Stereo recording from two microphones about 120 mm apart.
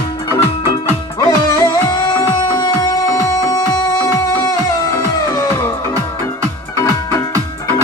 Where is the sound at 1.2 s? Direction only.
35° left (ahead or behind).